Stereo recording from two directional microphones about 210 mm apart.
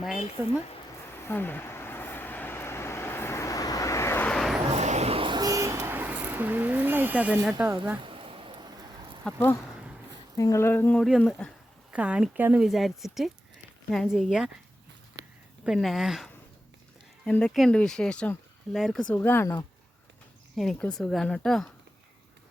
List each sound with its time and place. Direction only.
0.4 s speech: 10° right (ahead or behind)
1.1 s vehicle: 10° left (ahead or behind)
4.7 s vehicle: 30° right (ahead or behind); by 7.5 s 5° right (ahead or behind)
8.0 s a sound: 25° right (ahead or behind)
9.2 s speech: 10° left (ahead or behind)
11.0 s speech: centre (ahead or behind)
15.6 s speech: centre (ahead or behind)
20.6 s speech: 5° left (ahead or behind)